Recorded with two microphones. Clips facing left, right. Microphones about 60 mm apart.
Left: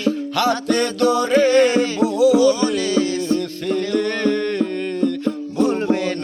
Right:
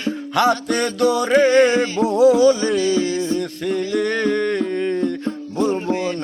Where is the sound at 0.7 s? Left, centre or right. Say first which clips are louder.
Left 1 dB; right.